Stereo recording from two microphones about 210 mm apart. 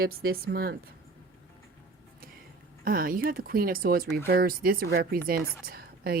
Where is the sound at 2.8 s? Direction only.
40° right (ahead or behind).